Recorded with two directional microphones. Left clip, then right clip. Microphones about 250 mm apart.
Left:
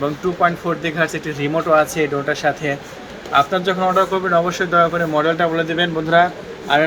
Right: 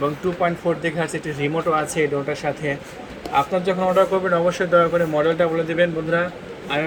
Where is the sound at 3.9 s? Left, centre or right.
Left.